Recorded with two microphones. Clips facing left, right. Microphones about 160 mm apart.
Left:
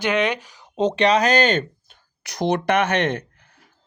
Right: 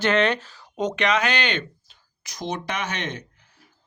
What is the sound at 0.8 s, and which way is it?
Speech, 30° left (ahead or behind).